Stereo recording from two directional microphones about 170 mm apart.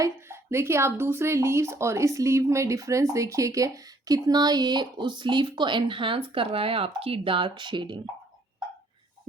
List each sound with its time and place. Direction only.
0.0 s speech: 15° right (ahead or behind)